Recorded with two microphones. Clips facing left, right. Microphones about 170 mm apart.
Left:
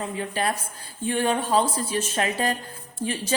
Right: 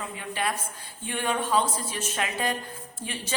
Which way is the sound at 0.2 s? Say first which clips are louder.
Left 2 dB; 35° left (ahead or behind).